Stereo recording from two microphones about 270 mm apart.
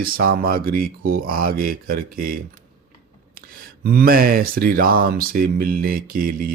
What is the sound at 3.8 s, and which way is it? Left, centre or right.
Speech, right.